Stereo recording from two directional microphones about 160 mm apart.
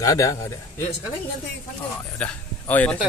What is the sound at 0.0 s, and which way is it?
Speech, 20° left (ahead or behind).